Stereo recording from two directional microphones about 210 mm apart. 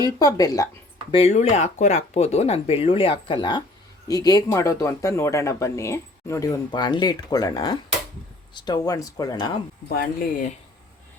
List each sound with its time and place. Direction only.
0.2 s speech: 15° left (ahead or behind)
1.1 s speech: 30° left (ahead or behind)
9.9 s speech: 45° left (ahead or behind)